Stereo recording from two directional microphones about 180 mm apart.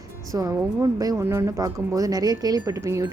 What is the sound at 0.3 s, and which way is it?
Speech, 20° right (ahead or behind).